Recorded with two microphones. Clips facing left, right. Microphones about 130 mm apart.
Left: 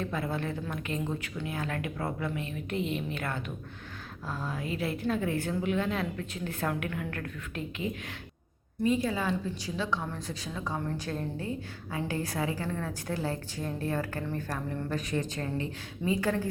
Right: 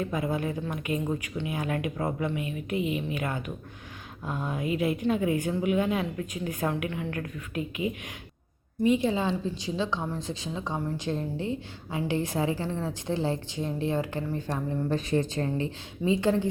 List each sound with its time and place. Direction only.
0.0 s a woman's voice: 15° right (ahead or behind)
8.8 s a woman's voice: 20° right (ahead or behind)
14.8 s a woman's voice: 30° right (ahead or behind)